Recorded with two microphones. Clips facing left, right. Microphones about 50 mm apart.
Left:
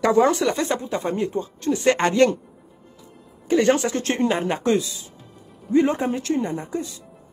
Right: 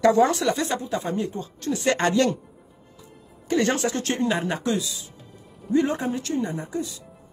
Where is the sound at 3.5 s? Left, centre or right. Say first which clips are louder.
Left 5 dB; left.